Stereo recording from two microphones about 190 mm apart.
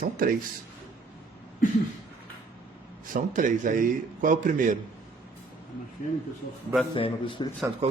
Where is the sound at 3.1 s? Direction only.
45° right (ahead or behind).